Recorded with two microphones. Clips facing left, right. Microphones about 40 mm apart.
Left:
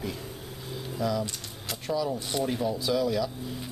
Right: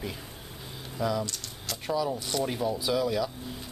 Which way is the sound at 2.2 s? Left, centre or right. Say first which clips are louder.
Even; centre.